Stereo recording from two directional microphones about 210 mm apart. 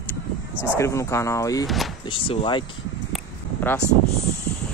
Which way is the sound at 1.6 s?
Centre (ahead or behind).